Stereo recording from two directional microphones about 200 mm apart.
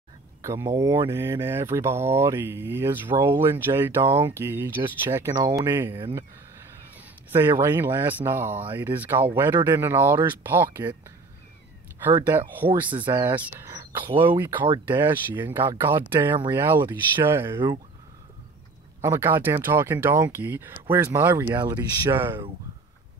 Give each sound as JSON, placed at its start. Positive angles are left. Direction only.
{"t": 0.4, "sound": "speech", "side_deg": -15}
{"t": 7.2, "sound": "speech", "side_deg": -10}
{"t": 12.1, "sound": "speech", "side_deg": -15}
{"t": 12.9, "sound": "speech", "side_deg": -25}
{"t": 18.9, "sound": "speech", "side_deg": -15}